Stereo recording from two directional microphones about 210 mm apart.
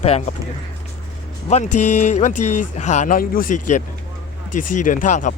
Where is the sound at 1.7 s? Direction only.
90° left.